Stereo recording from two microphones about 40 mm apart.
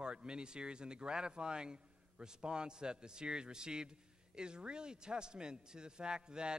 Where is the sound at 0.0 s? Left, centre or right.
Right.